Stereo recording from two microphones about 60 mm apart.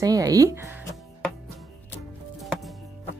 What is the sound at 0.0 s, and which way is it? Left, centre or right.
Speech, right.